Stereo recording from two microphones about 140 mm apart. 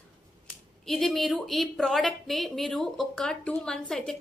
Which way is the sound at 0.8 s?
Centre (ahead or behind).